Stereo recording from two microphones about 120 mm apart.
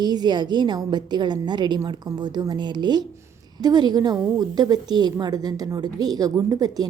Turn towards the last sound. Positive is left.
turn(degrees=-30)  # may be behind; listen again after turning